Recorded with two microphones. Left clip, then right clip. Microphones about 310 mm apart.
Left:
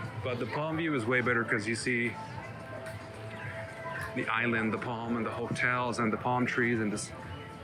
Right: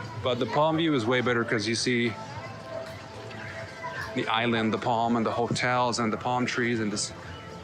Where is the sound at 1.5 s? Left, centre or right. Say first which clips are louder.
Right 5 dB; right.